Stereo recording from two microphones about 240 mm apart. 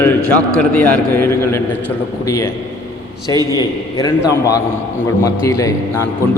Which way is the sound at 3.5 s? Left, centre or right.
Centre.